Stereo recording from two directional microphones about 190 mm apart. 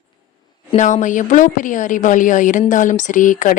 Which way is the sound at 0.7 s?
40° left (ahead or behind).